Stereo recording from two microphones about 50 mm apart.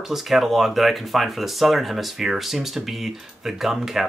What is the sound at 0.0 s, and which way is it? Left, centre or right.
Speech, centre.